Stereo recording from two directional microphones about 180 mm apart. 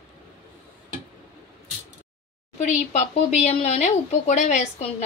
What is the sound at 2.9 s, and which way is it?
A woman's voice, 40° left (ahead or behind).